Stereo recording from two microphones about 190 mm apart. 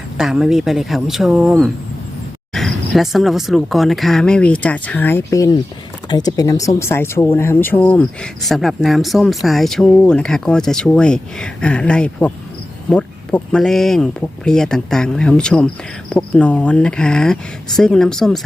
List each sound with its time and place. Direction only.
0.2 s speech: 5° right (ahead or behind)